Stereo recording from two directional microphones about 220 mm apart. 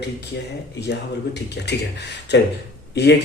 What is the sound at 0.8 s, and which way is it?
A man's voice, 50° left (ahead or behind).